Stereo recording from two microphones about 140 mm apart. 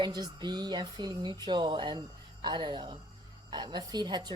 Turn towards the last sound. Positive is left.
turn(degrees=-30)  # may be behind; listen again after turning